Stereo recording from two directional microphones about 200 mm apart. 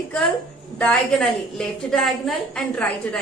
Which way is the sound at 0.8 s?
5° left (ahead or behind).